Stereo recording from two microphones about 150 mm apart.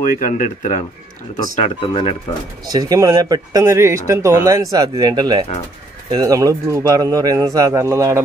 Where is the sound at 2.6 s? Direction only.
25° right (ahead or behind).